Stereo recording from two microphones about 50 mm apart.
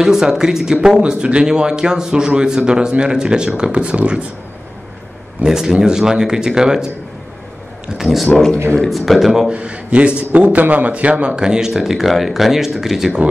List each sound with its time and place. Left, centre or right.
0.0 s a man's voice: centre
5.4 s a man's voice: centre
8.0 s speech: centre
9.5 s a man's voice: right
11.3 s speech: centre